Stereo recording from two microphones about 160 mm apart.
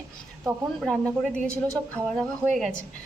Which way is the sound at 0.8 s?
Centre (ahead or behind).